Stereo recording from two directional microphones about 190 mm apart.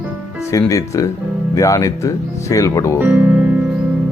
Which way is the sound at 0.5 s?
15° left (ahead or behind).